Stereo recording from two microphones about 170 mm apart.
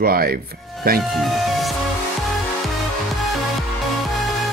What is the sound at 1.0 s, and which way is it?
Speech, centre (ahead or behind).